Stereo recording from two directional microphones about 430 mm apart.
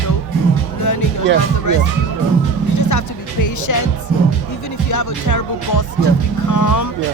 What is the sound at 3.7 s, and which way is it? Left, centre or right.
Speech, left.